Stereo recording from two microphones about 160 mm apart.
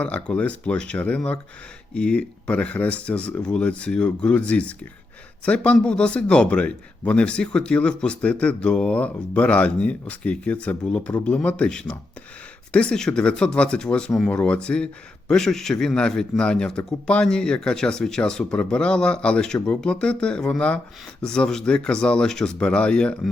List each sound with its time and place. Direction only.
0.0 s a man's voice: 5° left (ahead or behind)